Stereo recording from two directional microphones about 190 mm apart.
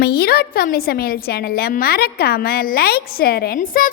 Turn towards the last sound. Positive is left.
turn(degrees=45)  # may be behind; listen again after turning